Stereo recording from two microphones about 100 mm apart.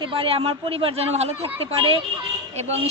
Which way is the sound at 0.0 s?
65° right (ahead or behind).